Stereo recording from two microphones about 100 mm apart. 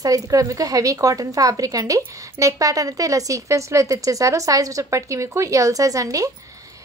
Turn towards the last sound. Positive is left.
turn(degrees=-35)  # may be behind; listen again after turning